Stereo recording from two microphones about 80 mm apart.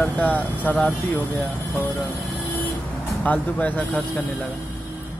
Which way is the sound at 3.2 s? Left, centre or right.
Centre.